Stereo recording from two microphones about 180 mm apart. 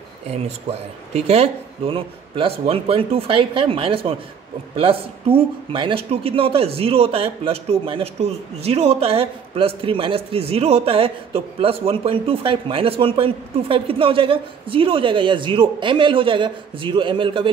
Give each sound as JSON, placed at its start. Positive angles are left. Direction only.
{"t": 0.3, "sound": "speech", "side_deg": -35}